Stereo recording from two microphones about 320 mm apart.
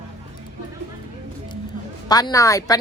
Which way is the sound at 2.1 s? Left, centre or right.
Centre.